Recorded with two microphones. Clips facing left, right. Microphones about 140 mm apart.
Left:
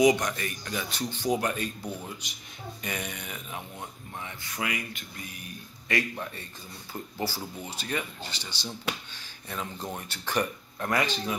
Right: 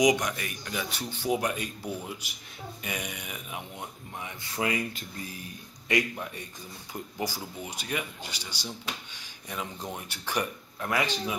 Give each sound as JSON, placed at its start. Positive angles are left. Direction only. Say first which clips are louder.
{"t": 0.0, "sound": "speech", "louder": "left 2 dB", "side_deg": -10}
{"t": 4.2, "sound": "speech", "louder": "right 3 dB", "side_deg": -25}
{"t": 5.9, "sound": "speech", "louder": "right 2 dB", "side_deg": -20}